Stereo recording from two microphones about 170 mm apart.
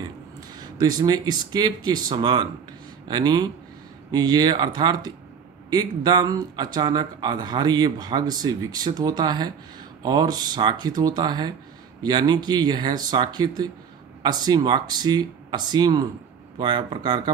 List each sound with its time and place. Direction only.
0.7 s speech: 20° right (ahead or behind)